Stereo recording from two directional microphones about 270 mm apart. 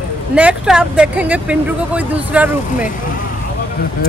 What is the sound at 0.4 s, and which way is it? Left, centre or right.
Speech, centre.